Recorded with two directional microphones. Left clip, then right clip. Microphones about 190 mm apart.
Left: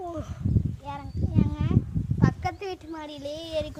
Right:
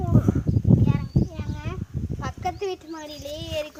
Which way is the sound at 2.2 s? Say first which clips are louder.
Right 1 dB; 45° left (ahead or behind).